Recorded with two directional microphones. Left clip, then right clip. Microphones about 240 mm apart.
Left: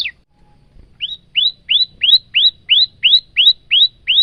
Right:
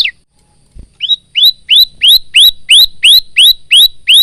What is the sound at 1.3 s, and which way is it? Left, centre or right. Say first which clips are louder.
Bird: right 6 dB; centre.